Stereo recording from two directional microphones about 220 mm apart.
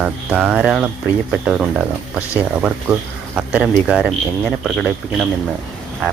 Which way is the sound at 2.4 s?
5° right (ahead or behind).